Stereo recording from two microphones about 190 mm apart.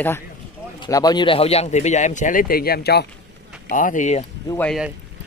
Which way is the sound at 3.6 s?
45° left (ahead or behind).